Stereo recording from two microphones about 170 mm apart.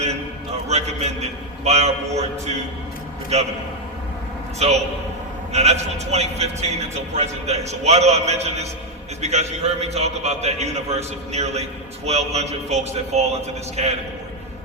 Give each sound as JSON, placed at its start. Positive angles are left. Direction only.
{"t": 0.7, "sound": "a man's voice", "side_deg": -40}
{"t": 4.6, "sound": "a man's voice", "side_deg": -40}